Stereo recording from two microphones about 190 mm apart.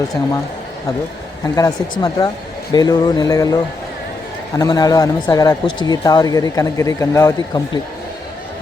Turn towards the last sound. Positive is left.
turn(degrees=20)  # may be behind; listen again after turning